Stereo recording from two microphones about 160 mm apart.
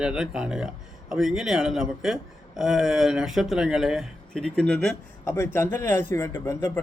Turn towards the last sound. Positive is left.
turn(degrees=15)  # may be behind; listen again after turning